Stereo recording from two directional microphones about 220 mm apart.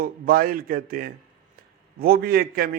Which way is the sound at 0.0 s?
40° right (ahead or behind).